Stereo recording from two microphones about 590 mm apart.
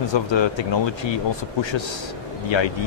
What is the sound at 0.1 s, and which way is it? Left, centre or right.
Speech, left.